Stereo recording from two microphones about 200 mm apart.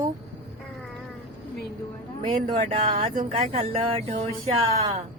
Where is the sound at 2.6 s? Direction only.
35° right (ahead or behind).